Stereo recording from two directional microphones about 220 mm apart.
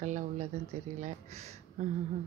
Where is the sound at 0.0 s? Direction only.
35° right (ahead or behind).